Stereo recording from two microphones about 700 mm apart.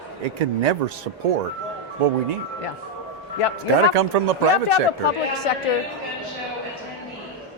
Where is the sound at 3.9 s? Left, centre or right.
Right.